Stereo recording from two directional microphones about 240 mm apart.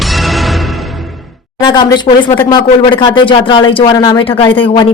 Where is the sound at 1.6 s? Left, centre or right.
Centre.